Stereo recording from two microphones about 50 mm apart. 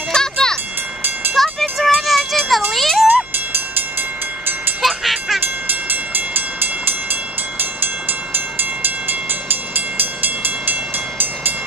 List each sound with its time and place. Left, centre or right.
0.1 s wind chime: centre
1.3 s music: centre
2.7 s wind chime: centre
4.8 s a sound: centre
5.4 s train: right